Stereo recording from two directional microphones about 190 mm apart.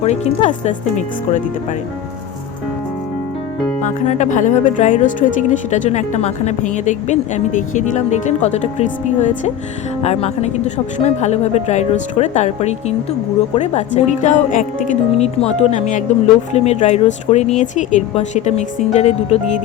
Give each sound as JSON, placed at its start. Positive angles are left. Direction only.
{"t": 0.0, "sound": "speech", "side_deg": 35}
{"t": 3.8, "sound": "speech", "side_deg": 35}